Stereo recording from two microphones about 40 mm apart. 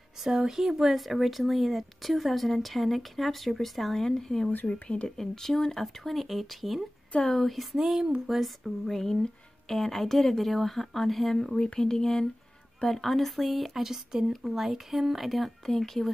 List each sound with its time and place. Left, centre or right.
0.2 s speech: centre
4.8 s speech: left
5.1 s speech: centre
7.7 s speech: centre
8.8 s speech: centre
11.8 s speech: centre